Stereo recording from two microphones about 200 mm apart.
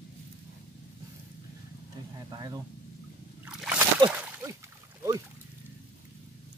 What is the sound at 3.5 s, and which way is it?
Slosh, 5° right (ahead or behind).